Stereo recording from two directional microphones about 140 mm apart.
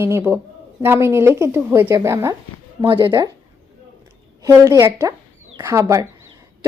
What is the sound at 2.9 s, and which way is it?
Speech, 35° right (ahead or behind).